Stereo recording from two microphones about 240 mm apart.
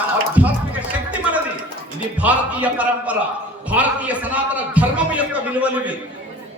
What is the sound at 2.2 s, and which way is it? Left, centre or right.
A man's voice, centre.